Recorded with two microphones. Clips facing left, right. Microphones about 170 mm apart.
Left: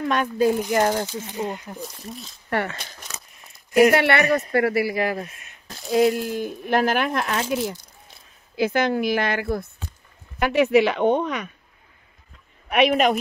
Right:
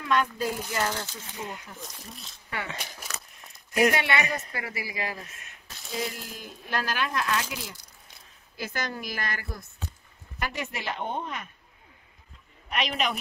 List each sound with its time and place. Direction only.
0.0 s speech: 50° left (ahead or behind)
1.8 s speech: centre (ahead or behind)
2.7 s speech: 10° right (ahead or behind)
3.9 s speech: 60° left (ahead or behind)
12.6 s speech: 60° left (ahead or behind)